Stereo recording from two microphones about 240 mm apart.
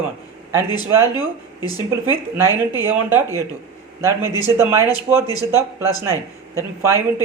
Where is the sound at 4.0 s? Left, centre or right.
Centre.